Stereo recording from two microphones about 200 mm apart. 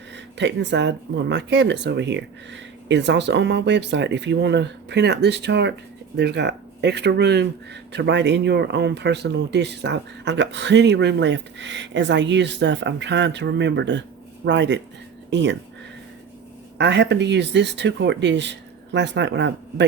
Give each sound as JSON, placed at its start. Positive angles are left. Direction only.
{"t": 0.3, "sound": "speech", "side_deg": -60}
{"t": 16.7, "sound": "speech", "side_deg": -60}